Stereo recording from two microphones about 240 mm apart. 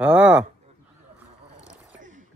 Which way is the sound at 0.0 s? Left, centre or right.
Centre.